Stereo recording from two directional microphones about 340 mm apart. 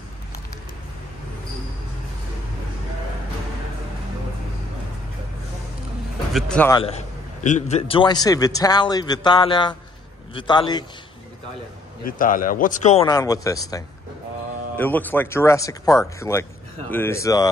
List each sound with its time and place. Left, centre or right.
6.3 s speech: centre
6.8 s a man's voice: centre
12.1 s a man's voice: left